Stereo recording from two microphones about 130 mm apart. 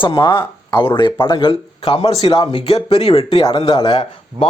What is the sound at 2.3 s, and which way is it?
Speech, 40° left (ahead or behind).